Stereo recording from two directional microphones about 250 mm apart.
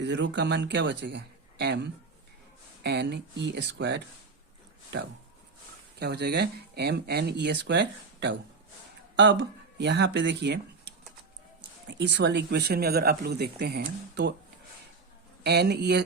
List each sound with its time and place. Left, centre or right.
0.0 s speech: right
6.0 s speech: right
11.9 s speech: right
15.4 s speech: right